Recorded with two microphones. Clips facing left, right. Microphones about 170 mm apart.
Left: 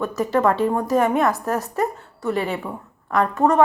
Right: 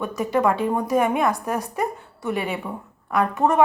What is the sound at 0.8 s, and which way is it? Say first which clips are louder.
Speech: left 1 dB; 15° right (ahead or behind).